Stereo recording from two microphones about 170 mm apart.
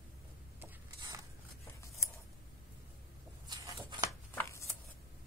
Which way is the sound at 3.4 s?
25° right (ahead or behind).